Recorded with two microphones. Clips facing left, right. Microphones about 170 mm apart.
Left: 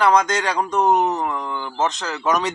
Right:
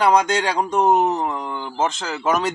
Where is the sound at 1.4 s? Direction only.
10° right (ahead or behind).